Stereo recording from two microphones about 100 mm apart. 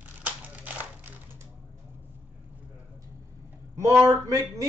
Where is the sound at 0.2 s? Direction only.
15° right (ahead or behind).